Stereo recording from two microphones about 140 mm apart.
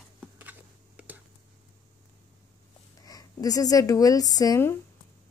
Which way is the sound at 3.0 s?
25° left (ahead or behind).